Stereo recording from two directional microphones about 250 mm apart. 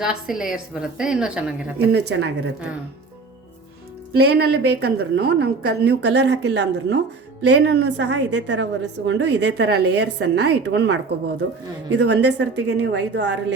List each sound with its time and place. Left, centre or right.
0.0 s a woman's voice: centre
1.9 s a woman's voice: right
4.2 s a woman's voice: right